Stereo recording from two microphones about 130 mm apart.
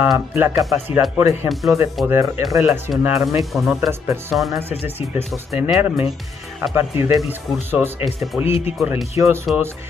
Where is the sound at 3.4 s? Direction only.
Centre (ahead or behind).